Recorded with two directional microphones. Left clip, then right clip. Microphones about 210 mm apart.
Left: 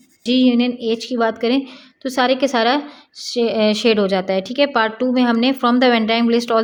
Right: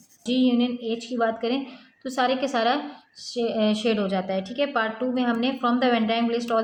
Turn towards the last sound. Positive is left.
turn(degrees=50)  # may be behind; listen again after turning